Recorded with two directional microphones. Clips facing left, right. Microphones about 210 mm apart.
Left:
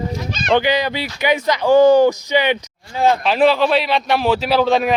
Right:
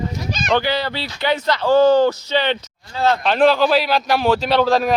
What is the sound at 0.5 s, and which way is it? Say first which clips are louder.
Speech: left 3 dB; 15° left (ahead or behind).